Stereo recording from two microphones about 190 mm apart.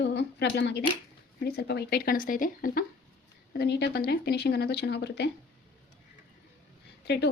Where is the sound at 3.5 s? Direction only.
60° left (ahead or behind).